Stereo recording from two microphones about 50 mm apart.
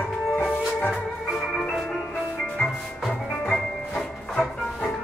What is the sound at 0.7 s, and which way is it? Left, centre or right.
Music, centre.